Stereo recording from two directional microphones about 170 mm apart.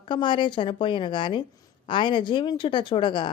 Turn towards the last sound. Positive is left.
turn(degrees=30)  # may be behind; listen again after turning